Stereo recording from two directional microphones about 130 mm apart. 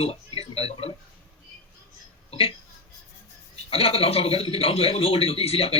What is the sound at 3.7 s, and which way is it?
A man's voice, 50° left (ahead or behind).